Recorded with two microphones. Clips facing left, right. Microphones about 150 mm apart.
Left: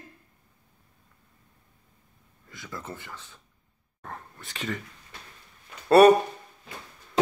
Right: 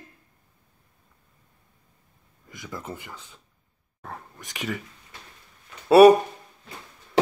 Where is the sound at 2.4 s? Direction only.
15° right (ahead or behind).